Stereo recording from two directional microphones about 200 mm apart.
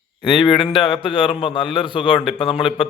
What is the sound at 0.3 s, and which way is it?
A man's voice, 20° left (ahead or behind).